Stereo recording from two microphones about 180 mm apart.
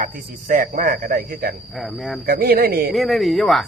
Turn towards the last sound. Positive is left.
turn(degrees=0)  # may be behind; listen again after turning